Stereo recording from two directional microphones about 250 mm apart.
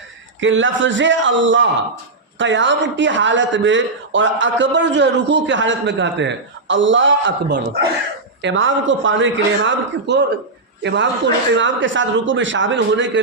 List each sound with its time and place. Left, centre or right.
0.3 s a man's voice: right